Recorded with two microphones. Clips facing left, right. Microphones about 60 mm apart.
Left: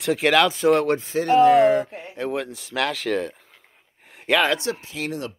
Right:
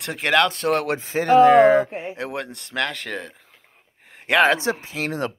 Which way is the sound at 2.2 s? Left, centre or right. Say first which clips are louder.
Left 3 dB; centre.